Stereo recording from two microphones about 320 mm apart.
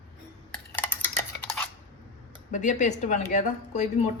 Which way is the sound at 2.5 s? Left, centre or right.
Left.